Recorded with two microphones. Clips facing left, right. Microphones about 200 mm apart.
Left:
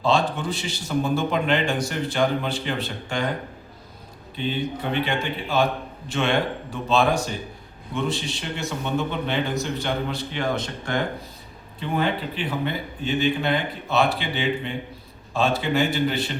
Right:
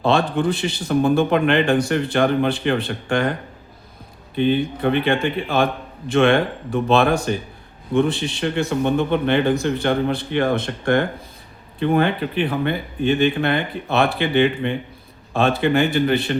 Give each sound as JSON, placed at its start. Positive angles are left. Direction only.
{"t": 0.0, "sound": "a man's voice", "side_deg": -60}
{"t": 4.4, "sound": "a man's voice", "side_deg": -55}